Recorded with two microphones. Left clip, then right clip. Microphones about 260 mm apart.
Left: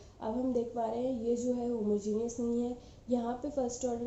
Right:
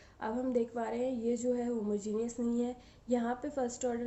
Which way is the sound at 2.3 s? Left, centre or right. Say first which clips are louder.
Left 1 dB; right.